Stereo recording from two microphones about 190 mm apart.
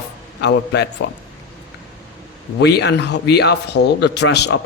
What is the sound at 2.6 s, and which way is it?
Speech, 65° left (ahead or behind).